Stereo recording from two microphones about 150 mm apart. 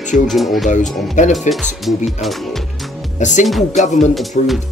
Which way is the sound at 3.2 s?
55° left (ahead or behind).